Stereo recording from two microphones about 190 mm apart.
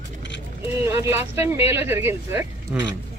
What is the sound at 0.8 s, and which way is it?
Speech, 15° right (ahead or behind).